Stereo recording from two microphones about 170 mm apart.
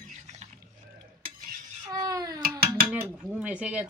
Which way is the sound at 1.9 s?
20° right (ahead or behind).